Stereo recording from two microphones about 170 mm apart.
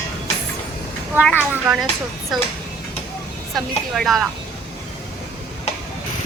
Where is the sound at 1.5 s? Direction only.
5° right (ahead or behind).